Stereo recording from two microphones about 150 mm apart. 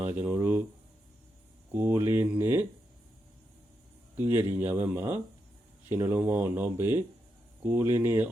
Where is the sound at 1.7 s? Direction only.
10° right (ahead or behind).